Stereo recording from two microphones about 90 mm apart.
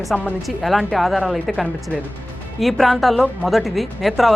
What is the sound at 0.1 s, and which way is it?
A woman's voice, centre (ahead or behind).